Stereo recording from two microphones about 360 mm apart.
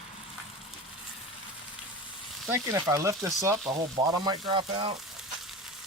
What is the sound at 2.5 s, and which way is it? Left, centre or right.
Speech, centre.